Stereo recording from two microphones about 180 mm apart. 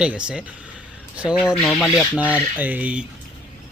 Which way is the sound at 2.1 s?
10° right (ahead or behind).